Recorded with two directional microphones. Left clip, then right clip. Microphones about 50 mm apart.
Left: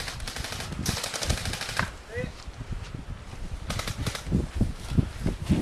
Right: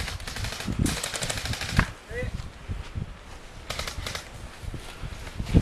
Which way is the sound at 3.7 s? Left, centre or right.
Centre.